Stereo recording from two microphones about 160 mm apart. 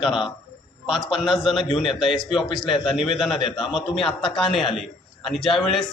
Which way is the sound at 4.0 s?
35° left (ahead or behind).